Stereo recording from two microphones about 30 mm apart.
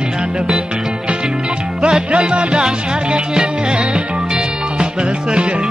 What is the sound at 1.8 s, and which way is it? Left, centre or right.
Music, right.